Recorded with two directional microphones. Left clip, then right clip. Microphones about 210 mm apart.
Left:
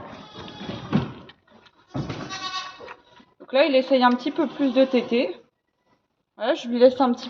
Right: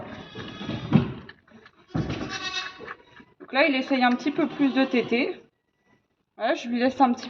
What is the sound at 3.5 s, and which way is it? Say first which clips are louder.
A woman's voice: left 4 dB; 20° left (ahead or behind).